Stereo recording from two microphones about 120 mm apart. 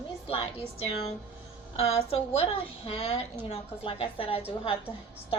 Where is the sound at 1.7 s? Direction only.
55° left (ahead or behind).